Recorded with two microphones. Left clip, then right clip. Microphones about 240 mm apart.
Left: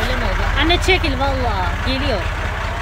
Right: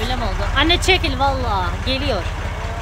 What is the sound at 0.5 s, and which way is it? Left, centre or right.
Speech, centre.